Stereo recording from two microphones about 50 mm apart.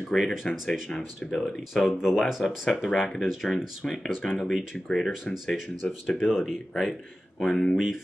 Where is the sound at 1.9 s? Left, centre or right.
Centre.